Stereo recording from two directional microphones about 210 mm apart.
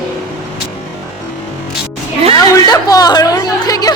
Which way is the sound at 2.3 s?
20° left (ahead or behind).